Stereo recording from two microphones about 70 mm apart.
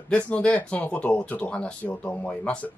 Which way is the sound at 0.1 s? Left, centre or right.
Centre.